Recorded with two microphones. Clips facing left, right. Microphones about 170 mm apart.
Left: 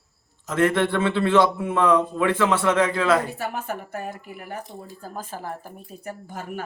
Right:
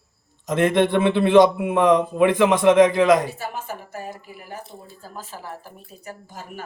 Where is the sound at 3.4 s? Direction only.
55° left (ahead or behind).